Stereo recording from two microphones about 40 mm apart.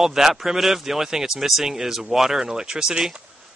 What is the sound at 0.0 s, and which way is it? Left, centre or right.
Speech, centre.